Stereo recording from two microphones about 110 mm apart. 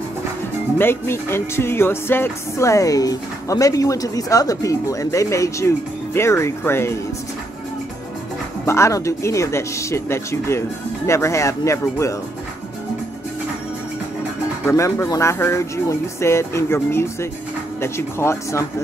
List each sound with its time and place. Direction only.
0.7 s speech: 20° left (ahead or behind)
8.6 s speech: 25° left (ahead or behind)
14.7 s speech: 25° left (ahead or behind)